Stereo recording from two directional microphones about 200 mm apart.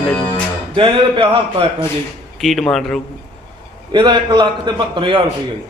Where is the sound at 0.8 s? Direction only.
25° right (ahead or behind).